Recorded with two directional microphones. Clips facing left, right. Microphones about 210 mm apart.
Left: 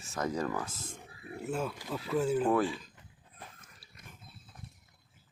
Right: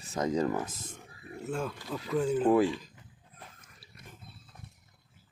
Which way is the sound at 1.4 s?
5° left (ahead or behind).